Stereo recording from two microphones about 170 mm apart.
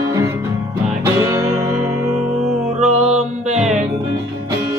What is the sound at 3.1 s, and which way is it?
Music, 40° right (ahead or behind).